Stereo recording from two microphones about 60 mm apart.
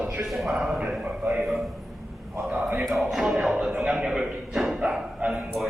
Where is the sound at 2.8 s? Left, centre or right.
Centre.